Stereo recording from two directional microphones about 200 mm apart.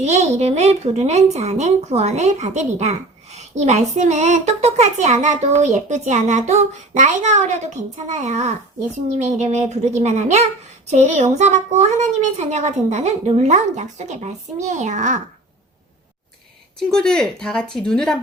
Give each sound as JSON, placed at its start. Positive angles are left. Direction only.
{"t": 0.0, "sound": "a woman's voice", "side_deg": -35}
{"t": 16.9, "sound": "speech", "side_deg": 5}